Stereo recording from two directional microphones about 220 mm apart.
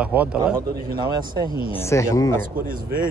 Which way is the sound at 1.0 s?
20° right (ahead or behind).